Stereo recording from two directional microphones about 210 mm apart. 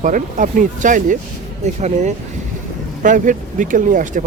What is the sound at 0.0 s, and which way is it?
Speech, 40° right (ahead or behind).